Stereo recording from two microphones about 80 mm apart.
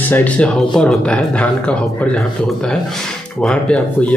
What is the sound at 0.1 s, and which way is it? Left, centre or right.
Speech, centre.